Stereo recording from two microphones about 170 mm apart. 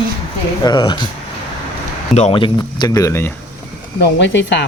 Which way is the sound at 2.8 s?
20° left (ahead or behind).